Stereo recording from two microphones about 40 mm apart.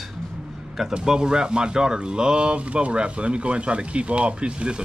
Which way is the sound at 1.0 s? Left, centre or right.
Centre.